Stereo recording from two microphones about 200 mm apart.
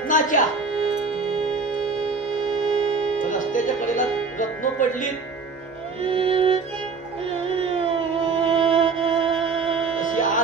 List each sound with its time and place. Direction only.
0.1 s speech: 40° left (ahead or behind)
0.7 s music: 30° right (ahead or behind)
3.2 s speech: 40° left (ahead or behind)
6.0 s music: 25° right (ahead or behind)
9.9 s music: 40° left (ahead or behind)